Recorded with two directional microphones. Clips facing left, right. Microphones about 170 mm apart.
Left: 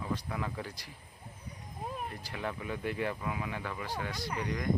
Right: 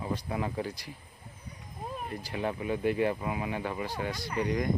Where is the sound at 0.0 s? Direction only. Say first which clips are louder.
Right 3 dB; 20° right (ahead or behind).